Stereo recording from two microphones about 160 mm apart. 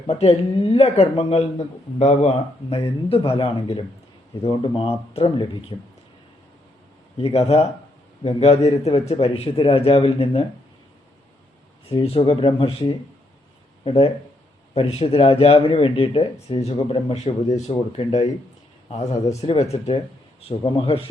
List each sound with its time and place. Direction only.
0.1 s speech: 40° left (ahead or behind)
7.2 s speech: 40° left (ahead or behind)
11.9 s a man's voice: 35° left (ahead or behind)